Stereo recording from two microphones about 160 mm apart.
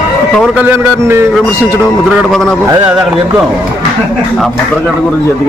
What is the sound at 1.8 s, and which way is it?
Speech, centre (ahead or behind).